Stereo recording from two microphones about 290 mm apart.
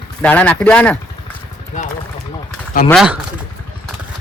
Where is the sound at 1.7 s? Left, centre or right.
Left.